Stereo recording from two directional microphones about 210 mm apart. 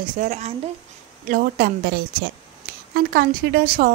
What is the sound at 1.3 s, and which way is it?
Speech, 45° right (ahead or behind).